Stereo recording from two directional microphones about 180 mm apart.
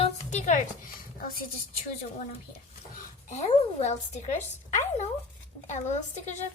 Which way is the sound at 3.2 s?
40° left (ahead or behind).